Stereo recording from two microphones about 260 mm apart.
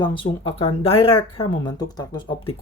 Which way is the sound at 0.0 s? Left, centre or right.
Centre.